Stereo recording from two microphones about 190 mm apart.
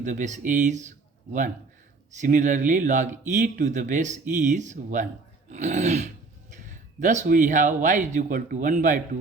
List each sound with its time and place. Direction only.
0.0 s speech: 40° right (ahead or behind)